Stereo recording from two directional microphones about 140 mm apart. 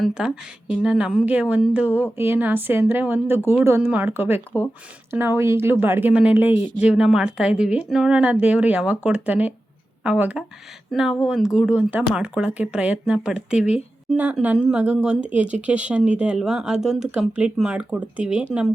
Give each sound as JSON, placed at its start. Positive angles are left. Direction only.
{"t": 0.0, "sound": "speech", "side_deg": -5}